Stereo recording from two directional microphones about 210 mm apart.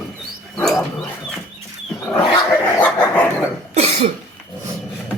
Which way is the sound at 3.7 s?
30° right (ahead or behind).